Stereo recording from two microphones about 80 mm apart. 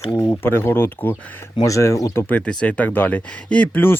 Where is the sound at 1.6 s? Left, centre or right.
Left.